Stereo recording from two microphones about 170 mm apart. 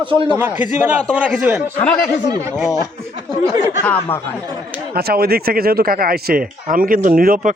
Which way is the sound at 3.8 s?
10° left (ahead or behind).